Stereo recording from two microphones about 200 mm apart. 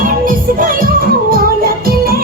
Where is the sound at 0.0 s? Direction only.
45° right (ahead or behind).